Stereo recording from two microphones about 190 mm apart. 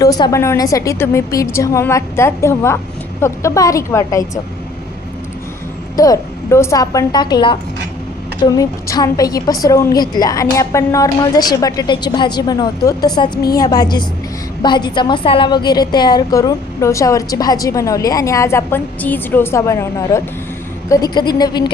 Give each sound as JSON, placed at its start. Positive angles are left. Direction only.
{"t": 0.0, "sound": "a woman's voice", "side_deg": 20}
{"t": 6.0, "sound": "a woman's voice", "side_deg": 15}